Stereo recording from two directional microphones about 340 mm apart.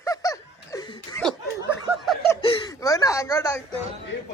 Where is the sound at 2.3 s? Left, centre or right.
Centre.